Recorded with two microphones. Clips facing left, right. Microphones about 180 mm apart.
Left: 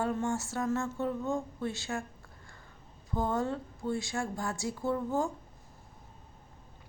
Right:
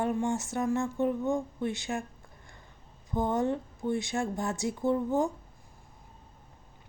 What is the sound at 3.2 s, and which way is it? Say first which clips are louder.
Speech: right 3 dB; 20° right (ahead or behind).